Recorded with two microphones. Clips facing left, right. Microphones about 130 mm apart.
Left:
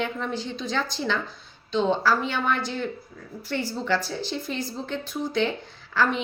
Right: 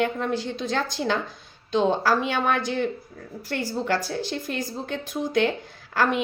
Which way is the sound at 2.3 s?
55° right (ahead or behind).